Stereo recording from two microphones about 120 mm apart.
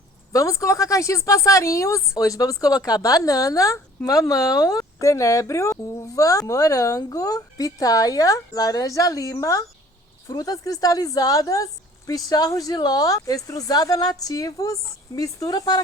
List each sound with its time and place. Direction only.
0.3 s a woman's voice: 25° left (ahead or behind)